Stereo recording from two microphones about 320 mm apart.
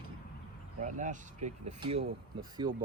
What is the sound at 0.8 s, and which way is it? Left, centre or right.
Speech, right.